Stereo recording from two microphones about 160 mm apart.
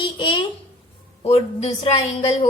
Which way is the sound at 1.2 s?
40° left (ahead or behind).